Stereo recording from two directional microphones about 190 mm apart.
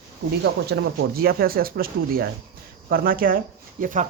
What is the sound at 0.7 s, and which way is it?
Speech, 50° right (ahead or behind).